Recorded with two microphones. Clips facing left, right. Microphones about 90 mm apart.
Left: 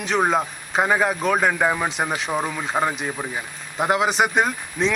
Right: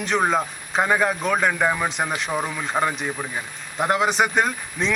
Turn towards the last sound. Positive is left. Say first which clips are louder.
# left 2 dB
turn(degrees=0)  # may be behind; listen again after turning